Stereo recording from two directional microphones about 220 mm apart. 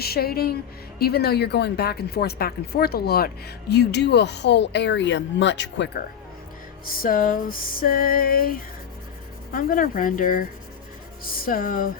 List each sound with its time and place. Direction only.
0.0 s speech: 45° left (ahead or behind)
6.9 s music: 40° left (ahead or behind)